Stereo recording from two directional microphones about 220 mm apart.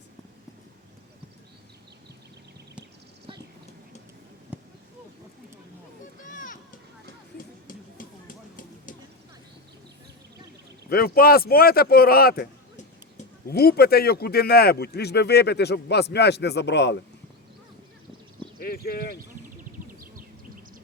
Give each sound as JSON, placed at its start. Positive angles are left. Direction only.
{"t": 4.5, "sound": "a sound", "side_deg": -5}
{"t": 6.2, "sound": "children playing", "side_deg": 35}
{"t": 7.3, "sound": "music", "side_deg": 40}
{"t": 10.8, "sound": "a man's voice", "side_deg": 45}
{"t": 18.6, "sound": "speech", "side_deg": 45}